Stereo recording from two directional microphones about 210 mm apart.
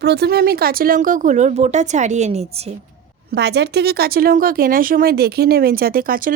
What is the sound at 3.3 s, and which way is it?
Speech, 50° right (ahead or behind).